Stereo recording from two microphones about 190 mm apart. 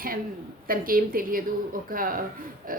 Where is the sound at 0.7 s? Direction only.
50° right (ahead or behind).